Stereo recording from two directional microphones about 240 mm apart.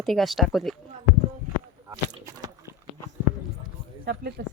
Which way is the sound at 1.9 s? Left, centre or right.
Centre.